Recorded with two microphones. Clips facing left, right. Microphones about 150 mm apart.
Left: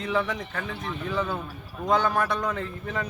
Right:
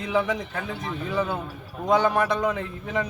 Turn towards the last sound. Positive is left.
turn(degrees=-15)  # may be behind; listen again after turning